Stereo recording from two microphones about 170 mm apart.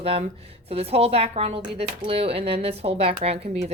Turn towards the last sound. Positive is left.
turn(degrees=-35)  # may be behind; listen again after turning